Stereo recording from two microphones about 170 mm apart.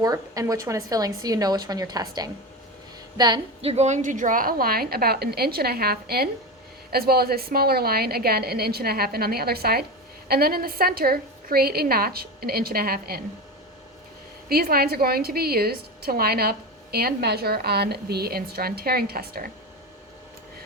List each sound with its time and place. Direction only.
0.0 s a woman's voice: 20° right (ahead or behind); by 13.2 s 65° right (ahead or behind)
14.5 s a woman's voice: 65° right (ahead or behind)